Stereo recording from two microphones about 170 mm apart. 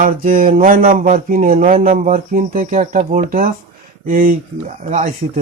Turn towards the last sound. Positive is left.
turn(degrees=-50)  # may be behind; listen again after turning